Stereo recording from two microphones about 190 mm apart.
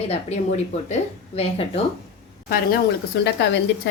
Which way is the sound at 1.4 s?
30° left (ahead or behind).